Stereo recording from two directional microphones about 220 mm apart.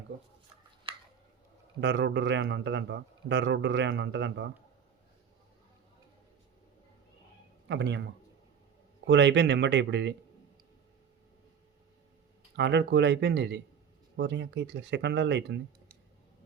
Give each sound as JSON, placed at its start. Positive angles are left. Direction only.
{"t": 0.9, "sound": "a sound", "side_deg": -25}
{"t": 1.8, "sound": "speech", "side_deg": -50}
{"t": 7.7, "sound": "speech", "side_deg": -55}
{"t": 9.0, "sound": "speech", "side_deg": -55}
{"t": 12.5, "sound": "speech", "side_deg": -50}